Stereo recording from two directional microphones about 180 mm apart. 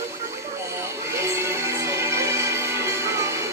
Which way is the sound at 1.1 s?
15° right (ahead or behind).